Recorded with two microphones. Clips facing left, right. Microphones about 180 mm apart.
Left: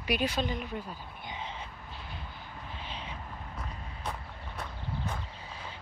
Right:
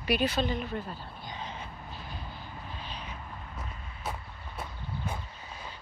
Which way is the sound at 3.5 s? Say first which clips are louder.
Left 1 dB; 5° right (ahead or behind).